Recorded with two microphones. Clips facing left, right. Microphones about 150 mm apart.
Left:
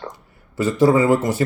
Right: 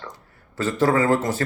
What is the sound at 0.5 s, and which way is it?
Speech, 10° left (ahead or behind).